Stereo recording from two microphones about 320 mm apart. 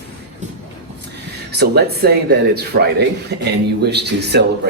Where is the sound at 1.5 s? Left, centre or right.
Right.